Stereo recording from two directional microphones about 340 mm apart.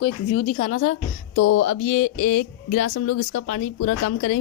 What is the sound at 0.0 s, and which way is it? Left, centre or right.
Speech, left.